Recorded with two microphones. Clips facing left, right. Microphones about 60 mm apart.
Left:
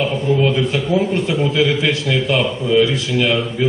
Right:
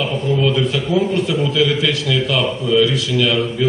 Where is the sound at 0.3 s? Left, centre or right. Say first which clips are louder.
Right 2 dB; left.